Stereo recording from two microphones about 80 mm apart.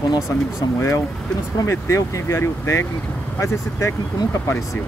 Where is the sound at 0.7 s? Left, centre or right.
Left.